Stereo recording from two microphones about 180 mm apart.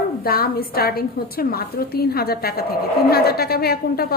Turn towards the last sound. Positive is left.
turn(degrees=60)  # may be behind; listen again after turning